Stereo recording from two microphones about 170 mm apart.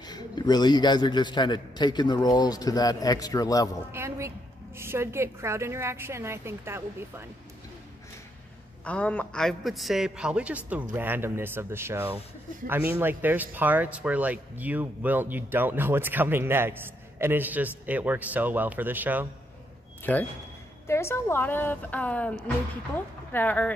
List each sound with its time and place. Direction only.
0.0 s a man's voice: 25° left (ahead or behind)
3.9 s speech: 15° right (ahead or behind)
8.8 s a man's voice: 10° left (ahead or behind); by 19.2 s 10° right (ahead or behind)
20.0 s a man's voice: 10° left (ahead or behind)
23.3 s a woman's voice: 10° left (ahead or behind)